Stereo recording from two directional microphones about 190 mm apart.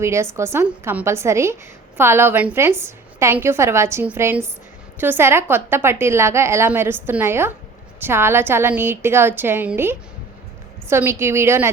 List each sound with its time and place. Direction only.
0.0 s a woman's voice: 15° right (ahead or behind)